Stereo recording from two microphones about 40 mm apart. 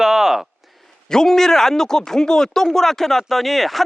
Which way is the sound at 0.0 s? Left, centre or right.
Centre.